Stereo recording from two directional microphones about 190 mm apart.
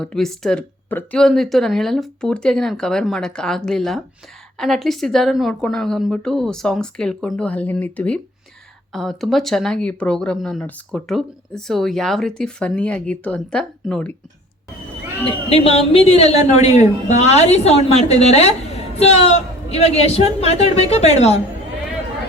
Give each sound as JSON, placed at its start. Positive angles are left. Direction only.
{"t": 0.0, "sound": "speech", "side_deg": 5}
{"t": 15.4, "sound": "a woman's voice", "side_deg": 30}